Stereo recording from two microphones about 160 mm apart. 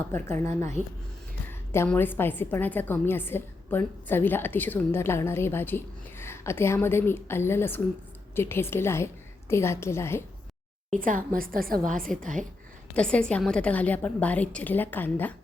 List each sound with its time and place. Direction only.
0.1 s a woman's voice: 15° left (ahead or behind)
10.9 s a woman's voice: 55° right (ahead or behind)
12.2 s a woman's voice: 50° right (ahead or behind)
12.9 s a woman's voice: 5° left (ahead or behind)